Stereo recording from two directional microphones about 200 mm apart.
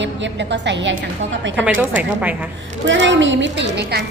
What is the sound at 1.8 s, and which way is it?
Speech, 10° right (ahead or behind).